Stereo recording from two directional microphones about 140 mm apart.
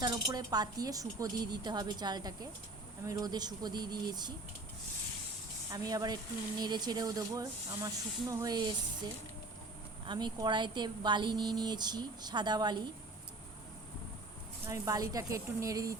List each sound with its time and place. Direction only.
0.0 s a woman's voice: 30° right (ahead or behind)
5.7 s a woman's voice: 25° right (ahead or behind)
10.1 s a woman's voice: 30° right (ahead or behind)
14.7 s a woman's voice: 25° right (ahead or behind)